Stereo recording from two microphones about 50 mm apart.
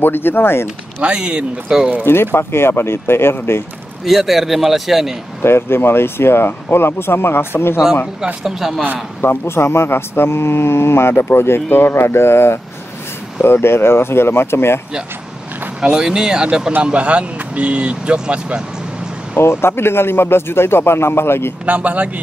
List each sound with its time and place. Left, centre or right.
0.0 s speech: left
1.0 s speech: centre
2.0 s speech: left
4.0 s a man's voice: centre
5.4 s speech: left
8.5 s a man's voice: centre
9.2 s speech: left
15.8 s speech: centre
19.3 s speech: left
21.6 s speech: right